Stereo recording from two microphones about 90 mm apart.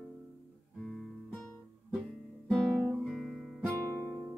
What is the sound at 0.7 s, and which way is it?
Guitar, 5° left (ahead or behind).